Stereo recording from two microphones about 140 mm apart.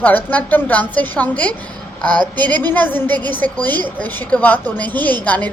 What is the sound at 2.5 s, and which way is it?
A woman's voice, 15° left (ahead or behind).